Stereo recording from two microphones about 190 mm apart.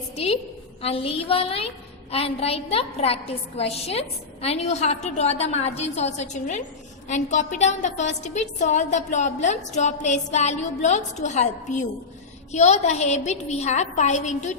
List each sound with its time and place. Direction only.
0.8 s a woman's voice: 30° left (ahead or behind)